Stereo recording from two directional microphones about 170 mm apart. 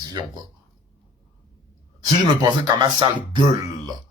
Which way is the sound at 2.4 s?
25° right (ahead or behind).